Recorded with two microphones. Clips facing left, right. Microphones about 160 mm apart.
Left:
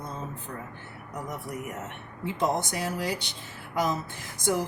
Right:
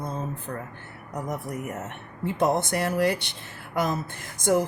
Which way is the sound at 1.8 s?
55° right (ahead or behind).